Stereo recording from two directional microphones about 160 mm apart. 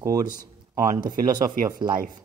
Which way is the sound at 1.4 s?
60° right (ahead or behind).